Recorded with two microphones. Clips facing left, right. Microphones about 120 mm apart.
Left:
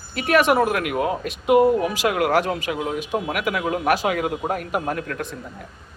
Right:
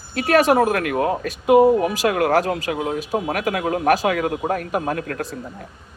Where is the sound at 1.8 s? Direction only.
45° right (ahead or behind).